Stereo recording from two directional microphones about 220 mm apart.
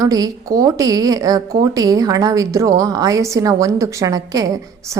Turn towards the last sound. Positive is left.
turn(degrees=-15)  # may be behind; listen again after turning